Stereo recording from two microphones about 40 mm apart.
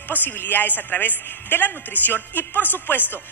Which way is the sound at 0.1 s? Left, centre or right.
Left.